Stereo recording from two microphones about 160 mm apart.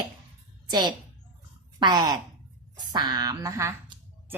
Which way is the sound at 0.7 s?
25° right (ahead or behind).